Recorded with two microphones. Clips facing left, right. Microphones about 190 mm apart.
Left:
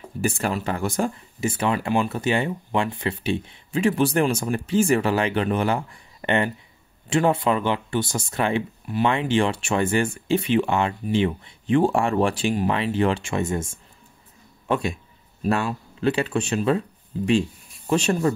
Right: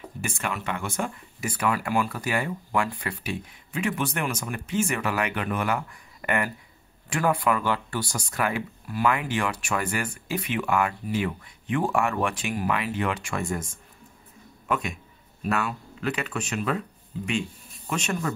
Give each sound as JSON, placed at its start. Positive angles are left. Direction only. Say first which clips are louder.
{"t": 0.2, "sound": "a man's voice", "louder": "left 7 dB", "side_deg": 35}